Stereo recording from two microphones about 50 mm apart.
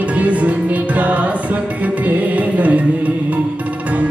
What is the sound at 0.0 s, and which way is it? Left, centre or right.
Music, right.